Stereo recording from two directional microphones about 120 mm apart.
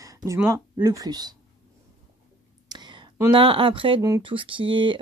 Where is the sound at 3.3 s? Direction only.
45° right (ahead or behind).